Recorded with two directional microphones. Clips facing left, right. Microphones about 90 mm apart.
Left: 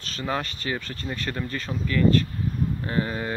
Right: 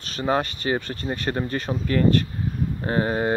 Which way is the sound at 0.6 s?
35° right (ahead or behind).